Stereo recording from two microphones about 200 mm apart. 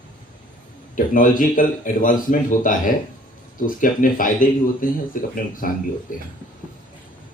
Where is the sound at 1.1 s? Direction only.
40° left (ahead or behind).